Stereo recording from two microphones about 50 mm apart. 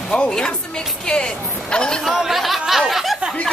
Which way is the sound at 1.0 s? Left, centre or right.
Centre.